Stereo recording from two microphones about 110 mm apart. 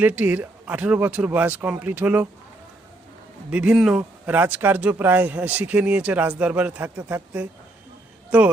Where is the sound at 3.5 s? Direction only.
10° right (ahead or behind).